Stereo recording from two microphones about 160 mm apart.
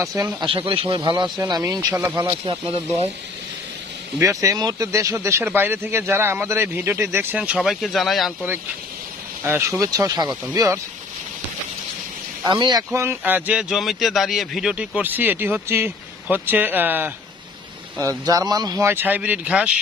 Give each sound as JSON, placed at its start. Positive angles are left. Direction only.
{"t": 0.0, "sound": "speech", "side_deg": -20}
{"t": 4.2, "sound": "speech", "side_deg": -20}
{"t": 9.4, "sound": "speech", "side_deg": -15}
{"t": 12.4, "sound": "speech", "side_deg": -25}